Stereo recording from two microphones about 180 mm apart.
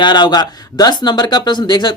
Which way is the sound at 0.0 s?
25° left (ahead or behind).